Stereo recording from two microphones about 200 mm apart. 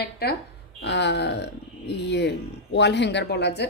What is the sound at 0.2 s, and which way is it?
A woman's voice, 50° left (ahead or behind).